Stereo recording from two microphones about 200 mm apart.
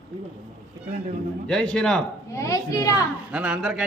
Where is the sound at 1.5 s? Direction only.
5° left (ahead or behind).